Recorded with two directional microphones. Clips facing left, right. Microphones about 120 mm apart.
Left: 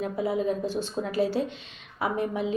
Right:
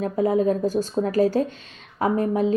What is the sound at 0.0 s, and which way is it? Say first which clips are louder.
A woman's voice: right 6 dB; 45° right (ahead or behind).